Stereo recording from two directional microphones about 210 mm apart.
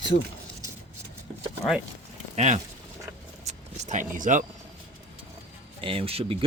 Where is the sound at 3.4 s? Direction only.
35° right (ahead or behind).